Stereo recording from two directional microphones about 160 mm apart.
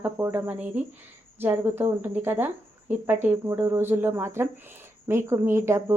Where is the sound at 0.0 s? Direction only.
10° right (ahead or behind).